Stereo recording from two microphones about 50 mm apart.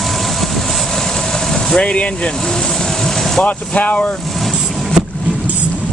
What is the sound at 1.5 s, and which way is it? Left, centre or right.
Vehicle, centre.